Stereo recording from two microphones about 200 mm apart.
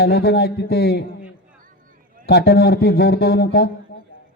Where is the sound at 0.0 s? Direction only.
55° left (ahead or behind).